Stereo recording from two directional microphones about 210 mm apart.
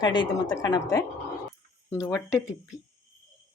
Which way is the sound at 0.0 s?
20° left (ahead or behind).